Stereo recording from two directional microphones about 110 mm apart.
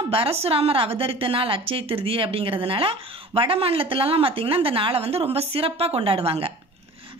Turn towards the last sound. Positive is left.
turn(degrees=-60)  # may be behind; listen again after turning